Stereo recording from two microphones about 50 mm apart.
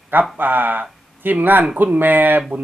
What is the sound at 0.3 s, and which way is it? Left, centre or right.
Speech, right.